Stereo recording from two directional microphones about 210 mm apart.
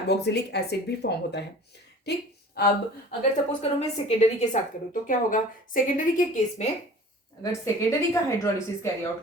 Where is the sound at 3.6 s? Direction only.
30° left (ahead or behind).